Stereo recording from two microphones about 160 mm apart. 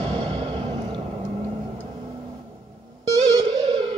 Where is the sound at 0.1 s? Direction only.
30° right (ahead or behind).